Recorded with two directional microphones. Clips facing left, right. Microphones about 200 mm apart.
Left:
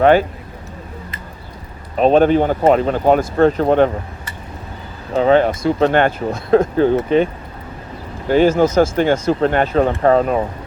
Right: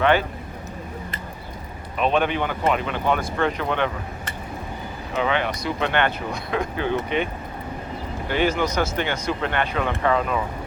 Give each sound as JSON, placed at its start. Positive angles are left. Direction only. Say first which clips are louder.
{"t": 0.0, "sound": "speech", "louder": "left 8 dB", "side_deg": 45}
{"t": 2.0, "sound": "speech", "louder": "left 10 dB", "side_deg": 40}
{"t": 5.1, "sound": "speech", "louder": "left 11 dB", "side_deg": 40}
{"t": 8.3, "sound": "speech", "louder": "left 10 dB", "side_deg": 40}